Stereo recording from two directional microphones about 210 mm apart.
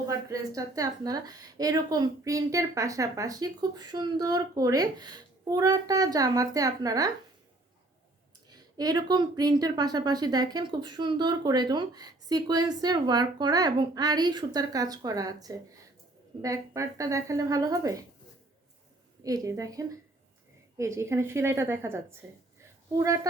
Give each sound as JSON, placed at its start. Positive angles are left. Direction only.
{"t": 0.1, "sound": "a woman's voice", "side_deg": -15}
{"t": 8.4, "sound": "a woman's voice", "side_deg": -20}
{"t": 19.2, "sound": "a woman's voice", "side_deg": -15}